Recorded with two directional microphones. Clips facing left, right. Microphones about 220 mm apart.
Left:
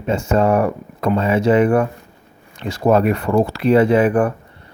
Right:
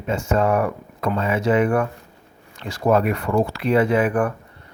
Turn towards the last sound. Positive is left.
turn(degrees=30)  # may be behind; listen again after turning